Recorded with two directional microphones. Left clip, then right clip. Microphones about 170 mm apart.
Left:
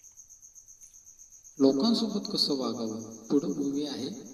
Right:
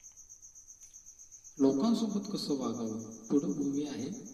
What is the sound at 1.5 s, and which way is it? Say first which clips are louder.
A man's voice: left 4 dB; 20° left (ahead or behind).